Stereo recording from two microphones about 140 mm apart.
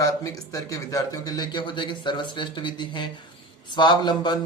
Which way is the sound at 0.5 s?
25° left (ahead or behind).